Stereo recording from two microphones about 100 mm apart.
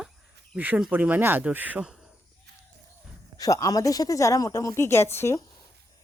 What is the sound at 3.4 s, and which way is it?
Speech, 35° left (ahead or behind).